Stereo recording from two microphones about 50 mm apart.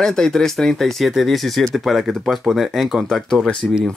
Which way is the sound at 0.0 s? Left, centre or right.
Centre.